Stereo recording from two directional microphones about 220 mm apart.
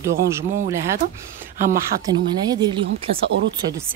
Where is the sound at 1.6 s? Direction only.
40° right (ahead or behind).